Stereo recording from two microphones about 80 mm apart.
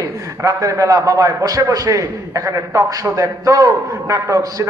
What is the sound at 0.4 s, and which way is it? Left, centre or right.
A man's voice, right.